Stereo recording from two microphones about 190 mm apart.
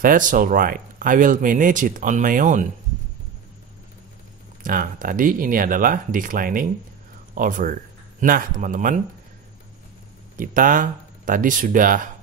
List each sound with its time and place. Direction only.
0.0 s speech: 45° right (ahead or behind)
4.6 s speech: 45° right (ahead or behind)
10.3 s speech: 45° right (ahead or behind)